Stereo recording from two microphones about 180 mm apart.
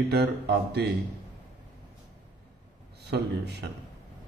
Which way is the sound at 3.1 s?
70° right (ahead or behind).